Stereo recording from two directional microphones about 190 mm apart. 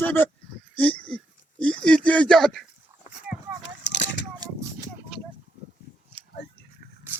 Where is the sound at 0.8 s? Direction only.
5° left (ahead or behind).